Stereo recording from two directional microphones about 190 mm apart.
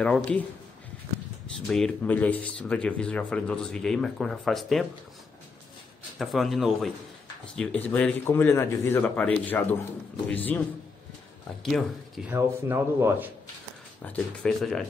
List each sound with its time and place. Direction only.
0.0 s speech: 5° left (ahead or behind)
1.7 s speech: 5° left (ahead or behind)
6.1 s a man's voice: centre (ahead or behind)
11.7 s speech: 5° right (ahead or behind)
14.0 s speech: 5° left (ahead or behind)